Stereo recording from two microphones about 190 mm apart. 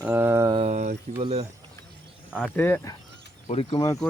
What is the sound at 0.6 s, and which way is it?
Speech, 35° right (ahead or behind).